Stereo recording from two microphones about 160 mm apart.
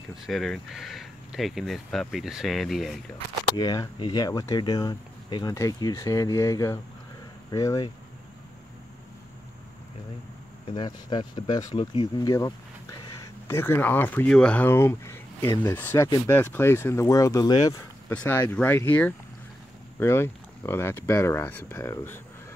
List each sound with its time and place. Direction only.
0.3 s speech: centre (ahead or behind)
3.5 s speech: 25° left (ahead or behind)
10.7 s speech: 30° left (ahead or behind)
13.5 s speech: 15° left (ahead or behind)
18.1 s speech: 10° left (ahead or behind)